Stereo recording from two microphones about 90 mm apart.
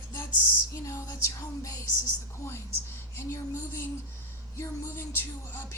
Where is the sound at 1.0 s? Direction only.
40° left (ahead or behind).